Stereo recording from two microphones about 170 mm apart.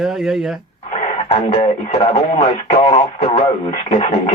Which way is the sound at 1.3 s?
35° left (ahead or behind).